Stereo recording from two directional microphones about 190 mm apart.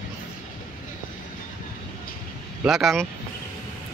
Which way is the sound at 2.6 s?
Centre (ahead or behind).